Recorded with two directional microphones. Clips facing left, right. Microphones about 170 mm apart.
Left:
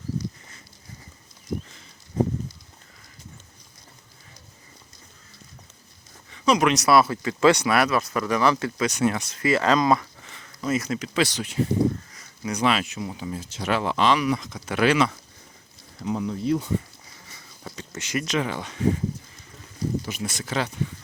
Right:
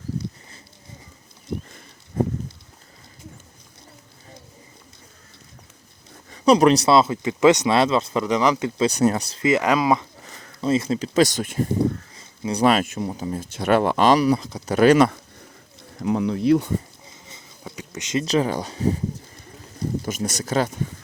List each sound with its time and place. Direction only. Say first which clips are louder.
2.2 s a sound: right 1 dB; 55° right (ahead or behind)
6.3 s speech: right 6 dB; 35° right (ahead or behind); by 8.7 s 15° right (ahead or behind)
8.8 s speech: right 6 dB; 35° right (ahead or behind)
9.4 s speech: right 1 dB; 20° right (ahead or behind)
10.2 s speech: right 5 dB; 35° right (ahead or behind)
12.1 s a sound: right 4 dB; 25° right (ahead or behind)
12.6 s speech: right 5 dB; 50° right (ahead or behind)
16.0 s speech: right 5 dB; 65° right (ahead or behind)
17.1 s a sound: right 3 dB; 20° right (ahead or behind)
17.6 s a sound: right 2 dB; 10° right (ahead or behind)
18.3 s speech: right 7 dB; 35° right (ahead or behind)
20.1 s speech: right 5 dB; 45° right (ahead or behind)